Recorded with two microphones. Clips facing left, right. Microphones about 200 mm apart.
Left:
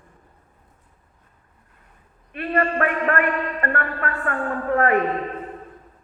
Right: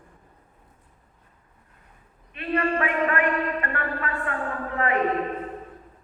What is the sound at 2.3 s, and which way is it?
A man's voice, 50° left (ahead or behind).